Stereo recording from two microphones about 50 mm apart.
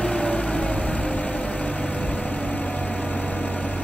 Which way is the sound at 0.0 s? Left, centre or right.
Left.